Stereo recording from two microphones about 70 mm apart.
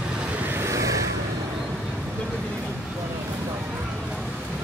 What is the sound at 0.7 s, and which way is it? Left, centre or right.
Vehicle, right.